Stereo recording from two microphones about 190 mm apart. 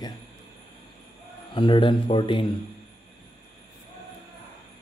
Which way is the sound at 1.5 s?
25° left (ahead or behind).